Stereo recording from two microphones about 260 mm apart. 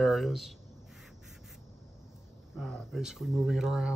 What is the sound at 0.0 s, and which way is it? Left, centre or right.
Speech, centre.